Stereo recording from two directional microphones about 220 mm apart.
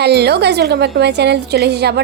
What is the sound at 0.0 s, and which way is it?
A woman's voice, 50° right (ahead or behind).